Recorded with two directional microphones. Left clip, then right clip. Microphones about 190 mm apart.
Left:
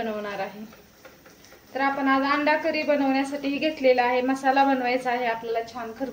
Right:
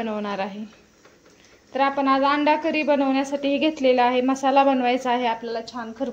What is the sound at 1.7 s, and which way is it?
A woman's voice, 45° right (ahead or behind).